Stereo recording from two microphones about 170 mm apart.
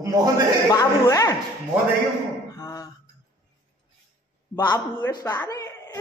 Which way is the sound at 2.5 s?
20° left (ahead or behind).